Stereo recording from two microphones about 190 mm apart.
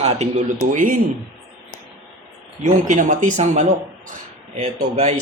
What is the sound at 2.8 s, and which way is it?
Speech, 40° right (ahead or behind).